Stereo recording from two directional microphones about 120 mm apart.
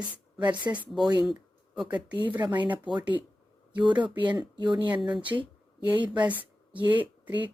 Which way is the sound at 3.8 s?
40° right (ahead or behind).